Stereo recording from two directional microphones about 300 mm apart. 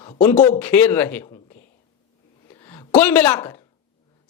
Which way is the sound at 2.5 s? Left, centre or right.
Centre.